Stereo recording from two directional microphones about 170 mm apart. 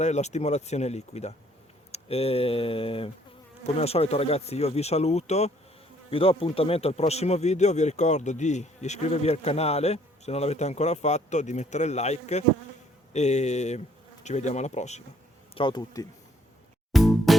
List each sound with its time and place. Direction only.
0.0 s speech: 40° left (ahead or behind)
15.5 s speech: 30° left (ahead or behind)
16.9 s music: centre (ahead or behind)